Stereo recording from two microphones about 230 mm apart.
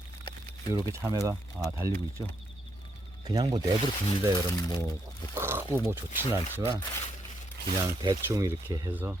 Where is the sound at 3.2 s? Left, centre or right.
Centre.